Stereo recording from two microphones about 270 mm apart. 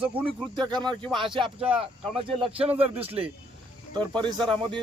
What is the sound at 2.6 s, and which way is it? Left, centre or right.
Speech, right.